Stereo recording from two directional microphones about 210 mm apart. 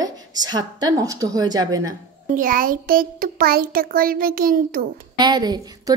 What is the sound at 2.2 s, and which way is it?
A child's voice, 40° right (ahead or behind).